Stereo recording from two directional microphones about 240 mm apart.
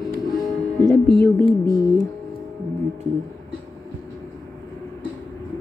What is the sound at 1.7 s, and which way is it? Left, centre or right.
Speech, centre.